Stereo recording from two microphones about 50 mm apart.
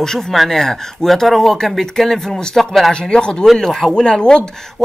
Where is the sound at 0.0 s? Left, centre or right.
Centre.